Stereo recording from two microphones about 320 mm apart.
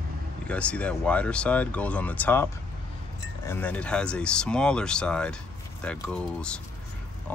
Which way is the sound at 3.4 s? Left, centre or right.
Centre.